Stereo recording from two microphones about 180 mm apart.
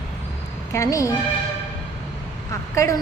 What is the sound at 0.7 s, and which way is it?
Speech, 15° left (ahead or behind).